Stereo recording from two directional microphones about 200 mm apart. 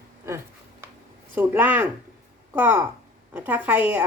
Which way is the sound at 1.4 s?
10° right (ahead or behind).